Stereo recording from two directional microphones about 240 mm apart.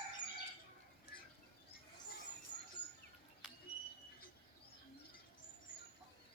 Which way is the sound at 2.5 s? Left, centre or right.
Centre.